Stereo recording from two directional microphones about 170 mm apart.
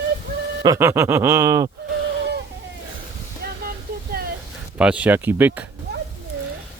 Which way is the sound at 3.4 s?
65° right (ahead or behind).